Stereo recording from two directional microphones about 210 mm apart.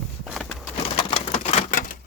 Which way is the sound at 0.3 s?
Centre (ahead or behind).